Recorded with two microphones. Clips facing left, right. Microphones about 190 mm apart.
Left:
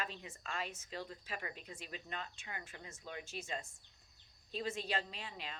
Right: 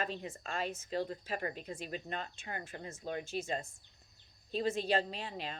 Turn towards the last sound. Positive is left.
turn(degrees=-35)  # may be behind; listen again after turning